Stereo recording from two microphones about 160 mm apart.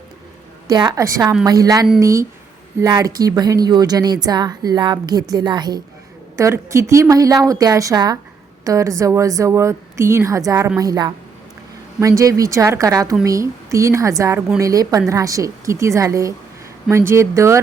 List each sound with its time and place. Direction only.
0.7 s a woman's voice: 25° right (ahead or behind)